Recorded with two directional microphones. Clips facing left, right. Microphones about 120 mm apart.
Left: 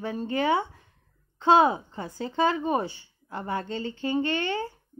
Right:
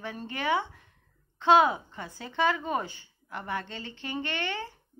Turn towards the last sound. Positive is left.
turn(degrees=30)  # may be behind; listen again after turning